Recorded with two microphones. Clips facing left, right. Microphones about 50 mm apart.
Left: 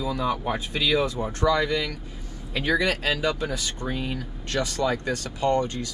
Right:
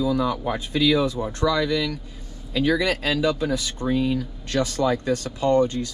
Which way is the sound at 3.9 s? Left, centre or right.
Left.